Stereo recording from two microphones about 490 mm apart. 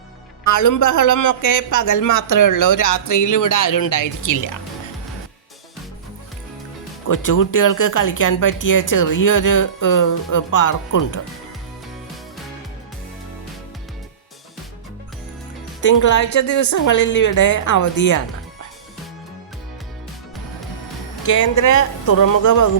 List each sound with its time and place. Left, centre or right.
0.4 s speech: left
7.1 s speech: left
15.9 s speech: left
21.2 s speech: left